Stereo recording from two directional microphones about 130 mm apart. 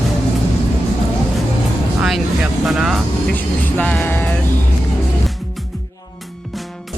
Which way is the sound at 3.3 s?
15° left (ahead or behind).